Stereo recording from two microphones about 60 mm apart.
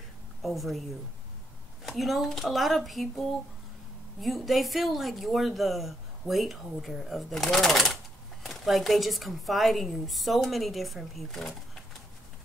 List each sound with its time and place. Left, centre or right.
0.4 s a woman's voice: centre
1.9 s a woman's voice: centre